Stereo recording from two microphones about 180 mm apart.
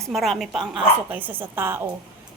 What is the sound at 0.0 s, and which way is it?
A woman's voice, centre (ahead or behind).